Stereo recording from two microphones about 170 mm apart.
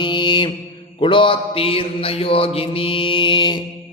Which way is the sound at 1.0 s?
30° left (ahead or behind).